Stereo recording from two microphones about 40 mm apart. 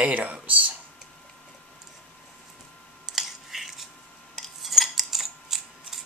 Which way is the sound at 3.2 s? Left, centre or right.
Centre.